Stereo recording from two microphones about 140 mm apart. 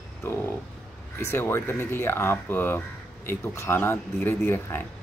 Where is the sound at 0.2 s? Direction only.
20° left (ahead or behind).